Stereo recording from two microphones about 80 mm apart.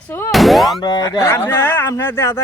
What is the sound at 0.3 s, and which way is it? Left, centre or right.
Boing, centre.